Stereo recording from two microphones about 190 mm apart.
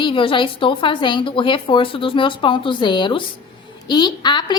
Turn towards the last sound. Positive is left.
turn(degrees=25)  # may be behind; listen again after turning